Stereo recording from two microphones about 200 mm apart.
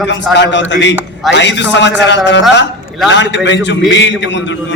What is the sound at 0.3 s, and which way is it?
A man's voice, 60° left (ahead or behind).